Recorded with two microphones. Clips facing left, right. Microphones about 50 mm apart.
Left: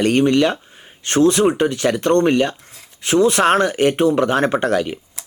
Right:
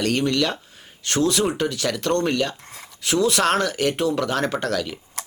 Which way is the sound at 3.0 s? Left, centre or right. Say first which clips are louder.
Left 5 dB; left.